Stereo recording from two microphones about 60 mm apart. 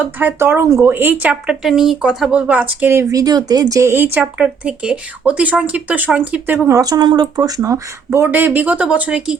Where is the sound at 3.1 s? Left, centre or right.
Right.